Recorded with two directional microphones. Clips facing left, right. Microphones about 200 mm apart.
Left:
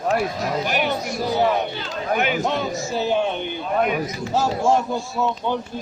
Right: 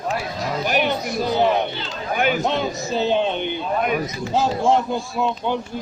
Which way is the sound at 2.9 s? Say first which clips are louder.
Right 2 dB; 20° right (ahead or behind).